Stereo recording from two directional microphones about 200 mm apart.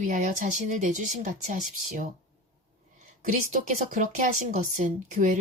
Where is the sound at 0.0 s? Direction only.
40° right (ahead or behind).